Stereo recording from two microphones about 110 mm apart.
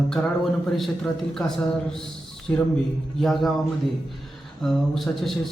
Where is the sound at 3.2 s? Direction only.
Centre (ahead or behind).